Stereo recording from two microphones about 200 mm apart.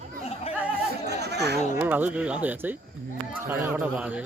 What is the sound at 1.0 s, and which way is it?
Chatter, 55° right (ahead or behind).